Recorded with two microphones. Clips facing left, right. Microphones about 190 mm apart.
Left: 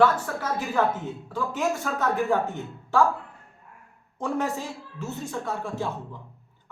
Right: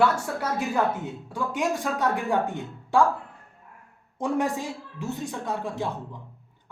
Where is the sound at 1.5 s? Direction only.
15° right (ahead or behind).